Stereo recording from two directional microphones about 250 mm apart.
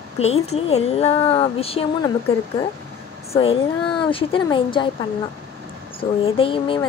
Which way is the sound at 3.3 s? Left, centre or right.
Left.